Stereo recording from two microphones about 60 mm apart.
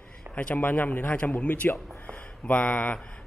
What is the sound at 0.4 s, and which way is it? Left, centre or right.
A man's voice, left.